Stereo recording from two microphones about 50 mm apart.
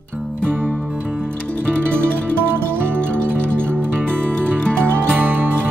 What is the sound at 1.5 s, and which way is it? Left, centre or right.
Music, left.